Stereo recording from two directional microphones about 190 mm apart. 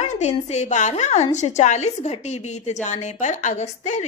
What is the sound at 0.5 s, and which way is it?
A woman's voice, 40° left (ahead or behind).